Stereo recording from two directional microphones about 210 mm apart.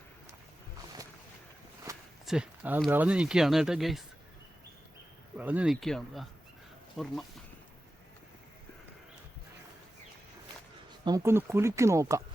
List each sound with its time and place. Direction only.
1.9 s walk: 15° right (ahead or behind)
2.2 s speech: 5° right (ahead or behind)
5.4 s speech: 5° right (ahead or behind)
11.0 s speech: 15° right (ahead or behind)